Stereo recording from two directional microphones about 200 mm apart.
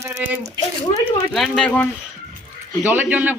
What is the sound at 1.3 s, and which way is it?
Speech, centre (ahead or behind).